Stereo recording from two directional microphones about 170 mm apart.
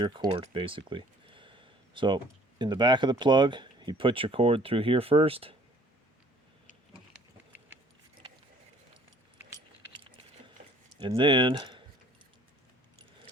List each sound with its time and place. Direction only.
0.0 s speech: 25° right (ahead or behind)
11.0 s speech: 30° right (ahead or behind)